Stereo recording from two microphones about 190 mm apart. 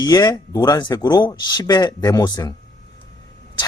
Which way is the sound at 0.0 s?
20° left (ahead or behind).